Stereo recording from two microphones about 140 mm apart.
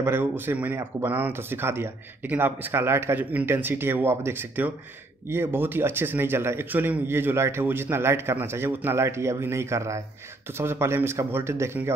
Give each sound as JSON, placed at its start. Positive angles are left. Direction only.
{"t": 0.0, "sound": "speech", "side_deg": -15}